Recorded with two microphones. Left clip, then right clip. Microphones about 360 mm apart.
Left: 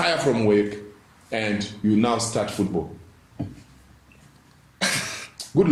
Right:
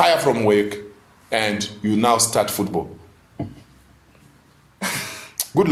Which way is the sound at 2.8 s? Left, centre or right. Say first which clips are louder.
Right 3 dB; right.